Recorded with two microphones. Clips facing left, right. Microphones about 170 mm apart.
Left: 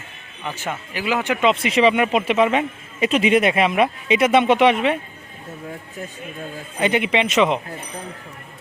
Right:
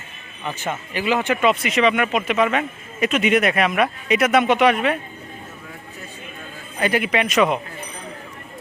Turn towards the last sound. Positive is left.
turn(degrees=25)  # may be behind; listen again after turning